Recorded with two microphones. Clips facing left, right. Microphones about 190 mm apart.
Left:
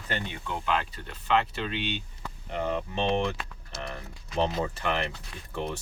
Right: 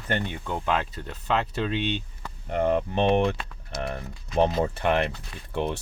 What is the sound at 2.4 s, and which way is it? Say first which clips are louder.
Speech: right 7 dB; 55° right (ahead or behind).